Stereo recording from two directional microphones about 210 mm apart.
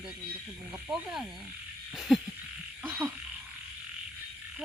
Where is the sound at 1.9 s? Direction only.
Centre (ahead or behind).